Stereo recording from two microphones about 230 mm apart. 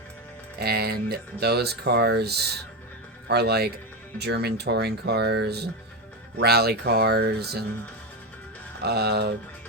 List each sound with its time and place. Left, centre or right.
0.6 s speech: right
8.8 s speech: right